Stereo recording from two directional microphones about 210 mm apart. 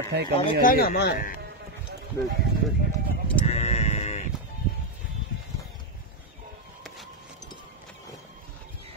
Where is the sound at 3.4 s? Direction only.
30° left (ahead or behind).